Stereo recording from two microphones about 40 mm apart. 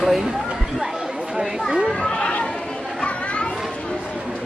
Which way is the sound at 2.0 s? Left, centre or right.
Left.